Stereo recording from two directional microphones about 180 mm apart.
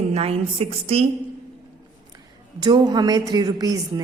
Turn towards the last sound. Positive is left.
turn(degrees=-20)  # may be behind; listen again after turning